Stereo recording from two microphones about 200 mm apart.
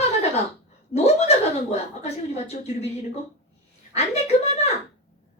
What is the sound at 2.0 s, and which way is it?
Speech, 35° left (ahead or behind).